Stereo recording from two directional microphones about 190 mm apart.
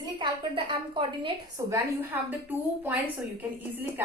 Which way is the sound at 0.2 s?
25° right (ahead or behind).